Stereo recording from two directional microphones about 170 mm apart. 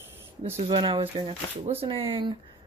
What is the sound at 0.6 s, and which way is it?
Speech, 30° right (ahead or behind).